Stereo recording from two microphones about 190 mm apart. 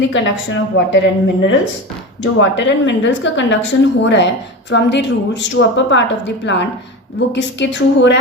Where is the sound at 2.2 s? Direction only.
75° left (ahead or behind).